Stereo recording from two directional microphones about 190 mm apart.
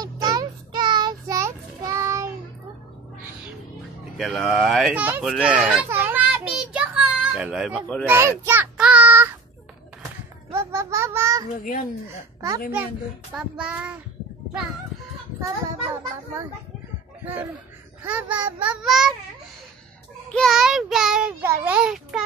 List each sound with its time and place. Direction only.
0.0 s child singing: 20° right (ahead or behind)
4.2 s a child's voice: centre (ahead or behind)
5.3 s child singing: 5° right (ahead or behind)
10.5 s a sound: 15° right (ahead or behind)
11.6 s speech: 50° left (ahead or behind)
13.3 s child singing: 5° right (ahead or behind)
17.2 s speech: 10° right (ahead or behind)
18.0 s child singing: 5° right (ahead or behind)
20.2 s a child's voice: centre (ahead or behind)